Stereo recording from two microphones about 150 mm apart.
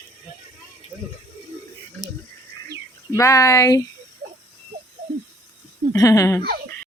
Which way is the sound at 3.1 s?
20° left (ahead or behind).